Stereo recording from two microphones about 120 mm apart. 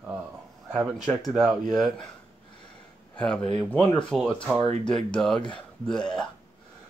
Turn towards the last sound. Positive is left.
turn(degrees=5)  # may be behind; listen again after turning